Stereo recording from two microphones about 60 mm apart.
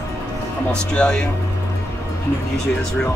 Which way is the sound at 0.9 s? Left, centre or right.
Centre.